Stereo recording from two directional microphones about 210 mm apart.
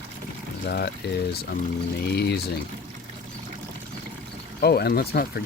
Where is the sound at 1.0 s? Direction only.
50° left (ahead or behind).